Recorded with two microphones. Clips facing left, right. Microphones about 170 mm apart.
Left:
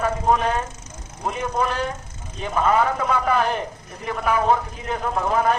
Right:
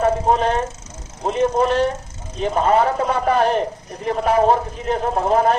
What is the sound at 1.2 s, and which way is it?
A man's voice, 30° right (ahead or behind).